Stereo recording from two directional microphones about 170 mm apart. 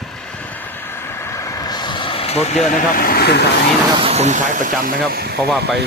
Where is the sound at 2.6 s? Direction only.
50° left (ahead or behind); by 3.4 s 70° left (ahead or behind).